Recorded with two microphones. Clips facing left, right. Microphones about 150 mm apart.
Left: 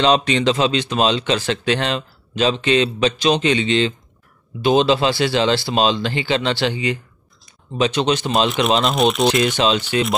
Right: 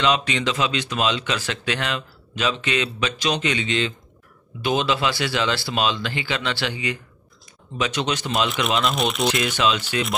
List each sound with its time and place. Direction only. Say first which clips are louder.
0.0 s speech: left 6 dB; 30° left (ahead or behind)
8.9 s speech: left 6 dB; centre (ahead or behind)
9.6 s speech: left 4 dB; 30° left (ahead or behind)